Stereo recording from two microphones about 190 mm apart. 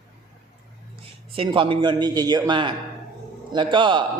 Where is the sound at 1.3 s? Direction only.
30° right (ahead or behind).